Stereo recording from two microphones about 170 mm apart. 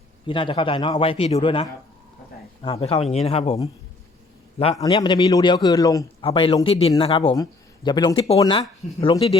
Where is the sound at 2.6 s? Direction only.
35° left (ahead or behind).